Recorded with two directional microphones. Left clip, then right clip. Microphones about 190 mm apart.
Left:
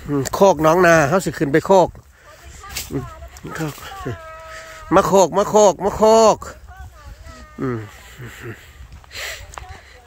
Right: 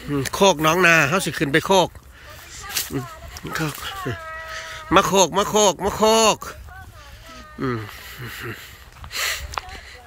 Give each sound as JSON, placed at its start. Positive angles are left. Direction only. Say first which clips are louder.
{"t": 0.1, "sound": "speech", "louder": "left 3 dB", "side_deg": 25}
{"t": 3.4, "sound": "speech", "louder": "right 2 dB", "side_deg": 20}
{"t": 7.6, "sound": "speech", "louder": "left 1 dB", "side_deg": 20}
{"t": 9.1, "sound": "a sound", "louder": "right 5 dB", "side_deg": 15}